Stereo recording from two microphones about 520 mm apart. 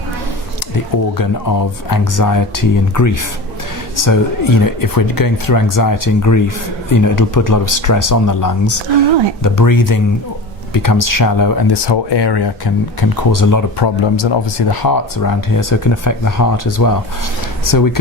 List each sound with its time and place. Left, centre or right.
1.2 s speech: left
13.8 s speech: left